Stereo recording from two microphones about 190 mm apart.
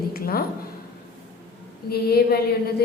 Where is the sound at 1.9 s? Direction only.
55° left (ahead or behind).